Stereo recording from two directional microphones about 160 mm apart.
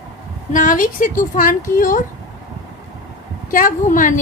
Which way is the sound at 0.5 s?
55° left (ahead or behind).